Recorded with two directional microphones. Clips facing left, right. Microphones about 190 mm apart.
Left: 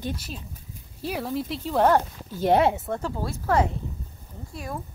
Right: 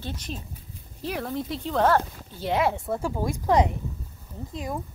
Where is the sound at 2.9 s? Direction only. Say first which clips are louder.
Right 2 dB; 10° right (ahead or behind).